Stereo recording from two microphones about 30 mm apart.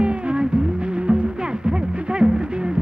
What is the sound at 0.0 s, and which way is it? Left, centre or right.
Music, right.